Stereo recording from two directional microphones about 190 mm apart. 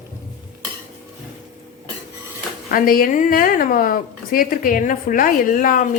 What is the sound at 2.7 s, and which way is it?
A woman's voice, 45° left (ahead or behind).